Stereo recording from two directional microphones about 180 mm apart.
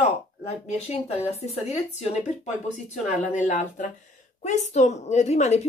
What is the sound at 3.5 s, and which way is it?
A woman's voice, 45° left (ahead or behind).